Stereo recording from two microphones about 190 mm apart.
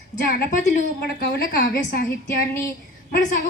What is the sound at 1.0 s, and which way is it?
A woman's voice, 55° left (ahead or behind).